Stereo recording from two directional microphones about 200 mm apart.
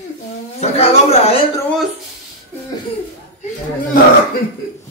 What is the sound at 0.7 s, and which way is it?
Speech, 30° left (ahead or behind).